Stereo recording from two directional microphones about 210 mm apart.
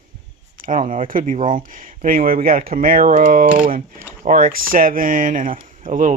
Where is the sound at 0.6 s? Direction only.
35° right (ahead or behind).